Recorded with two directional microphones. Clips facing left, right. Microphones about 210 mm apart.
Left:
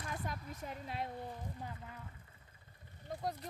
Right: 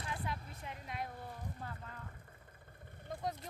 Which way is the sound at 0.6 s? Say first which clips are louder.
Left 6 dB; 35° left (ahead or behind).